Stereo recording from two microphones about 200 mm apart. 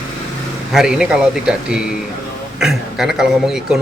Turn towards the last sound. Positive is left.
turn(degrees=-5)  # may be behind; listen again after turning